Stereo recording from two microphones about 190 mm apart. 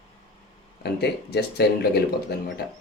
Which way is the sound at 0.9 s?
60° left (ahead or behind).